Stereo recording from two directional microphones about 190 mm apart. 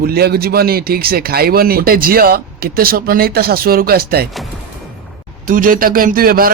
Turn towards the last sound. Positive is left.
turn(degrees=-50)  # may be behind; listen again after turning